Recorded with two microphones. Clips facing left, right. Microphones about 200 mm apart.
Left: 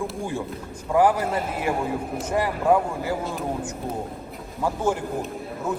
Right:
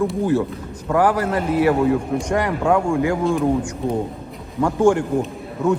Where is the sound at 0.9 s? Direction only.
70° right (ahead or behind).